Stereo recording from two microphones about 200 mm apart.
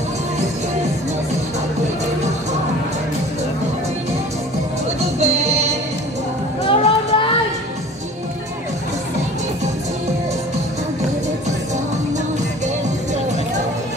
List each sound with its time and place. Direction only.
5.2 s music: 35° right (ahead or behind)
6.7 s music: 25° left (ahead or behind)